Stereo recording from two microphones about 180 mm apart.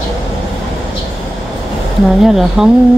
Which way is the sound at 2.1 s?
Centre (ahead or behind).